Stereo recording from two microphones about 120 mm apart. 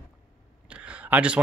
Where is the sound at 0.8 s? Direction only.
10° right (ahead or behind).